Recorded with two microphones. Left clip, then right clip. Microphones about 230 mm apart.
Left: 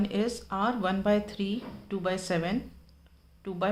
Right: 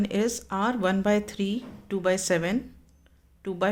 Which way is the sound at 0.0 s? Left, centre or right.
Right.